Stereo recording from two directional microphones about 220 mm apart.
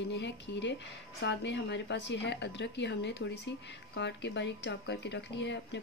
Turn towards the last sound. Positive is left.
turn(degrees=55)  # may be behind; listen again after turning